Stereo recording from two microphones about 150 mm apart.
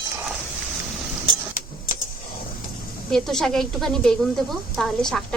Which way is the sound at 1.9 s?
65° left (ahead or behind).